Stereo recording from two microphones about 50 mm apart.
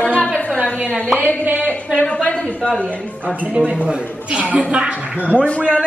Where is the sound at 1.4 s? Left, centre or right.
Right.